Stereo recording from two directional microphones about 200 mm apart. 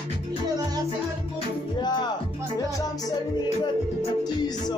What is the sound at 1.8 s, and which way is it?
Music, 20° left (ahead or behind).